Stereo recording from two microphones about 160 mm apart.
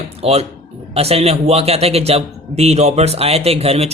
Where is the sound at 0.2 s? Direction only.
40° right (ahead or behind).